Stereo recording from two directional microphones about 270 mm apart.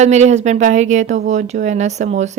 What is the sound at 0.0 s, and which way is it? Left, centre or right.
Speech, right.